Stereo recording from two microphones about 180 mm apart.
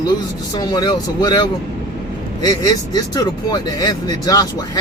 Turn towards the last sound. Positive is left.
turn(degrees=20)  # may be behind; listen again after turning